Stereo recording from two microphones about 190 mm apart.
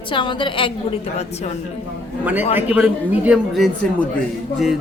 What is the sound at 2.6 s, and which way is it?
A woman's voice, 5° right (ahead or behind).